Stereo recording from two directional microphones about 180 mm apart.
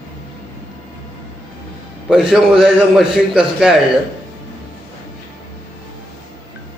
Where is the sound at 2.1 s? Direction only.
5° right (ahead or behind).